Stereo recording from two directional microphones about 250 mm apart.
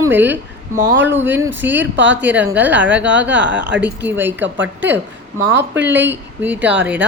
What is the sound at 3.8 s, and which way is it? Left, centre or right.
Speech, centre.